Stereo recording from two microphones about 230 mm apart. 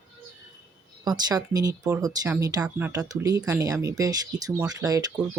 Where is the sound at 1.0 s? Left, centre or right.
Centre.